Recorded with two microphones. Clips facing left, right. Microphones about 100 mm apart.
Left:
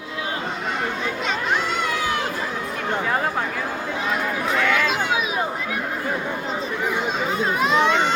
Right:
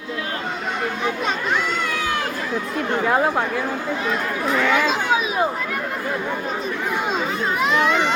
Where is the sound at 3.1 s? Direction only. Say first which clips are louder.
Right 6 dB; 10° right (ahead or behind).